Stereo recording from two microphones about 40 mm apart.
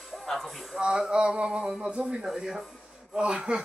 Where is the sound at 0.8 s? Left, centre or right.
Right.